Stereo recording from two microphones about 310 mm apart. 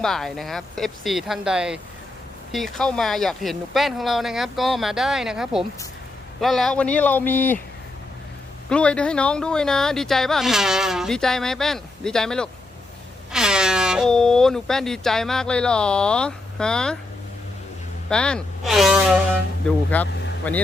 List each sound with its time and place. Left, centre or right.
0.0 s speech: centre
8.7 s speech: centre
18.1 s speech: centre